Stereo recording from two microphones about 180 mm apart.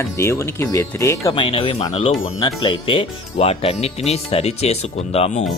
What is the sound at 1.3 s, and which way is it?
Speech, 30° left (ahead or behind).